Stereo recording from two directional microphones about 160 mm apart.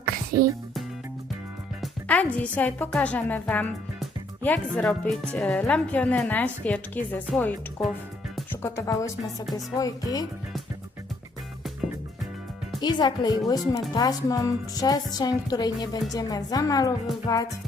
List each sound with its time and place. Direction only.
0.4 s speech: 70° right (ahead or behind)
1.8 s a woman's voice: 10° left (ahead or behind)
8.6 s speech: 20° left (ahead or behind)
12.8 s speech: 25° left (ahead or behind)